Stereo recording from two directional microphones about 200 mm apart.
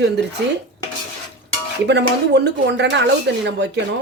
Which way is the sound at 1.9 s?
60° right (ahead or behind).